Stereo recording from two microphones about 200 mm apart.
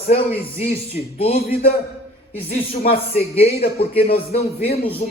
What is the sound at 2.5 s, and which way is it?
Music, 30° left (ahead or behind).